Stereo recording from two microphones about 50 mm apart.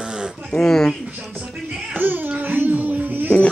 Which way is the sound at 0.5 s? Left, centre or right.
Centre.